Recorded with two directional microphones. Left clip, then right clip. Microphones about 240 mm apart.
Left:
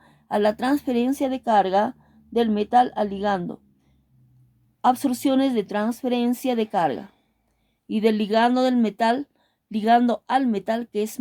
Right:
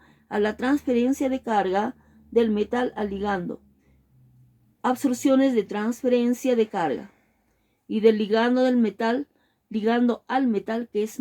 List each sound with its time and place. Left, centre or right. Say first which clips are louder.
0.0 s speech: left 4 dB; left
4.8 s speech: left 3 dB; left